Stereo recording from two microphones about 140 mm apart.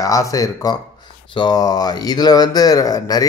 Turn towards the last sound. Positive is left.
turn(degrees=25)  # may be behind; listen again after turning